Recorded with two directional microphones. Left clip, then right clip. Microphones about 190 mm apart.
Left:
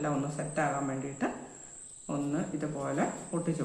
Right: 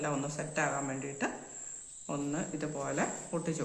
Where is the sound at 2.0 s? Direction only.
25° right (ahead or behind).